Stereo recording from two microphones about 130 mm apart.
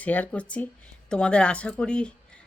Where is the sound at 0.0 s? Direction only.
10° left (ahead or behind).